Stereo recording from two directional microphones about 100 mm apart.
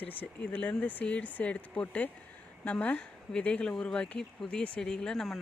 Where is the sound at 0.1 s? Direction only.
15° left (ahead or behind).